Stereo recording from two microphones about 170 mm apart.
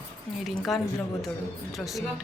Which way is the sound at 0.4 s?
Centre (ahead or behind).